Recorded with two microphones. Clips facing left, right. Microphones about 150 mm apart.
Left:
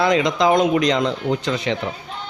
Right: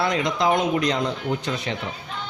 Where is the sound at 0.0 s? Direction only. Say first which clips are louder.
Left 5 dB; 90° left.